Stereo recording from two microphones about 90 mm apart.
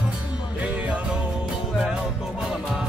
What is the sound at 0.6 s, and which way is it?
Music, 15° right (ahead or behind).